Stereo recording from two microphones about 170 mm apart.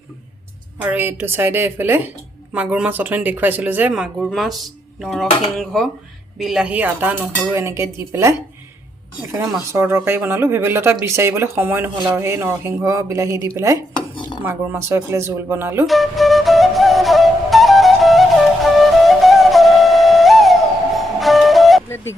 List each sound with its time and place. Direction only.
0.8 s speech: 10° right (ahead or behind)
9.7 s speech: 15° right (ahead or behind)
15.9 s flute: centre (ahead or behind)